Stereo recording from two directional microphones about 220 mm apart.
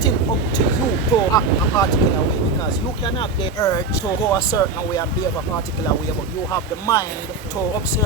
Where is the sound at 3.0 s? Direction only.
20° left (ahead or behind).